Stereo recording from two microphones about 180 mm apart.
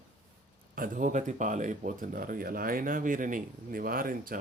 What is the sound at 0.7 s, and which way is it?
Speech, 50° right (ahead or behind).